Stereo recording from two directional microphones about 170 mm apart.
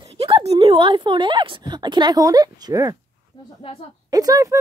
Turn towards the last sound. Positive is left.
turn(degrees=-20)  # may be behind; listen again after turning